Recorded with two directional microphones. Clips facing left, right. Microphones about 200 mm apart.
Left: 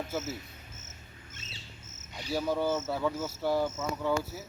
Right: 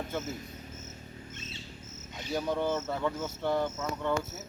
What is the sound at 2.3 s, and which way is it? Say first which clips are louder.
Speech: left 1 dB; 5° left (ahead or behind).